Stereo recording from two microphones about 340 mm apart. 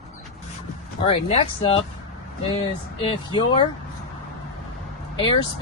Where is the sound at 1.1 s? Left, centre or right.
Centre.